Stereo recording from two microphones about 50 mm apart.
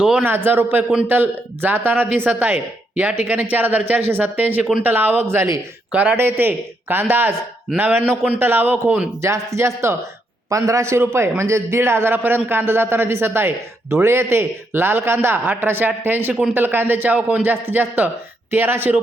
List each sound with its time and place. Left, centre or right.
0.2 s a man's voice: right
5.2 s speech: right
5.9 s speech: right
6.1 s a man's voice: right
8.4 s speech: right
9.2 s speech: right
10.5 s a man's voice: right
17.2 s speech: right
17.4 s a man's voice: right